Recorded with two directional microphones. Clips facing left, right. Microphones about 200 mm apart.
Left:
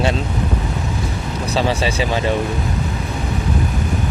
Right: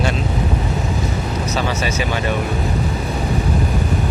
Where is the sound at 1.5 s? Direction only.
30° left (ahead or behind).